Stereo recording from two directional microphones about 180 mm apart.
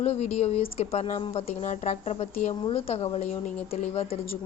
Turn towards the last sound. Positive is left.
turn(degrees=35)  # may be behind; listen again after turning